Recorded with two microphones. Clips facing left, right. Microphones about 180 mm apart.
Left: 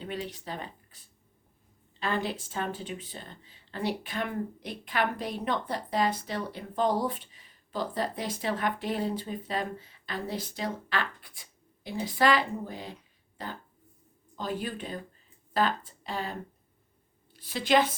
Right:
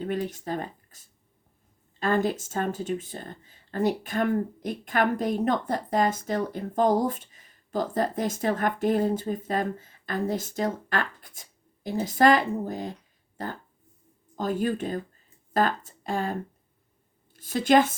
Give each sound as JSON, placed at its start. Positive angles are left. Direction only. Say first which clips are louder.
{"t": 0.0, "sound": "a woman's voice", "louder": "right 7 dB", "side_deg": -45}